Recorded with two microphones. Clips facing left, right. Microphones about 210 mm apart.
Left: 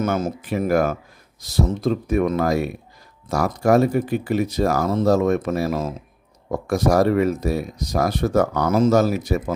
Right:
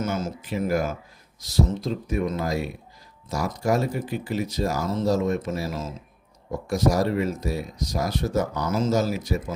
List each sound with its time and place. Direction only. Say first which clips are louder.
0.0 s speech: left 5 dB; 60° left (ahead or behind)